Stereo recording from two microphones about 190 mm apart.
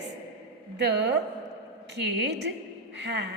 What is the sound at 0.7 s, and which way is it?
A woman's voice, 65° right (ahead or behind).